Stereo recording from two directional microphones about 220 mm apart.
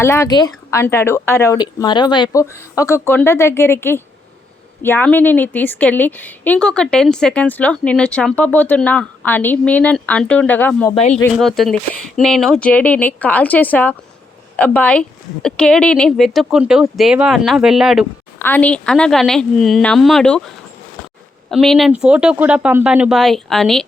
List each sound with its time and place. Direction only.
0.0 s a woman's voice: 10° left (ahead or behind)
10.9 s speech: 30° left (ahead or behind)
11.3 s a woman's voice: centre (ahead or behind)
18.3 s a woman's voice: 10° left (ahead or behind)
21.5 s a woman's voice: centre (ahead or behind)